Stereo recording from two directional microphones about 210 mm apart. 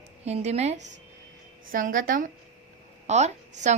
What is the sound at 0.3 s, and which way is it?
A woman's voice, 30° right (ahead or behind).